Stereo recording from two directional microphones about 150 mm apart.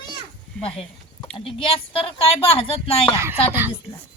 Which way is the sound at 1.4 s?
40° left (ahead or behind).